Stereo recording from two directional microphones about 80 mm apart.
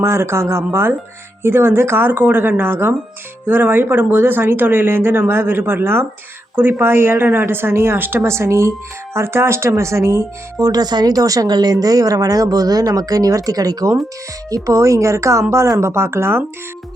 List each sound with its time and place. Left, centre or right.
0.0 s a woman's voice: right
10.6 s speech: right
14.5 s speech: right